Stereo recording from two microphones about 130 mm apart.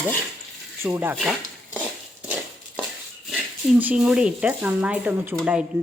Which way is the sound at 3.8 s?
10° right (ahead or behind).